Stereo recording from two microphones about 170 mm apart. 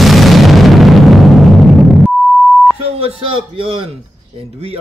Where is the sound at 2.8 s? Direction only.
35° right (ahead or behind).